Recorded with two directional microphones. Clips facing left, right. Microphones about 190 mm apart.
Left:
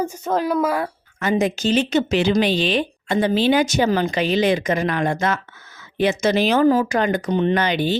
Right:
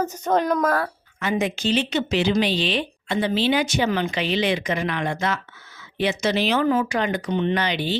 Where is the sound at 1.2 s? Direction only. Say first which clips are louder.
Left 4 dB; 40° left (ahead or behind).